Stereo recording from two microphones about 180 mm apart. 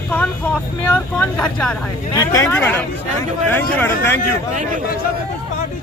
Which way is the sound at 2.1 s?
15° left (ahead or behind).